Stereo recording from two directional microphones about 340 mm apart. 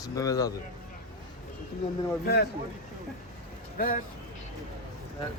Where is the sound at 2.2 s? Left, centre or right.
Left.